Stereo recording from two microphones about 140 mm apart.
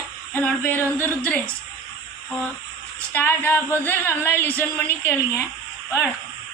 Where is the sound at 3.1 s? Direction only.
15° left (ahead or behind).